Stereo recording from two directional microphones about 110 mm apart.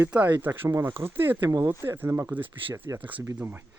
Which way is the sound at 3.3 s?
15° right (ahead or behind).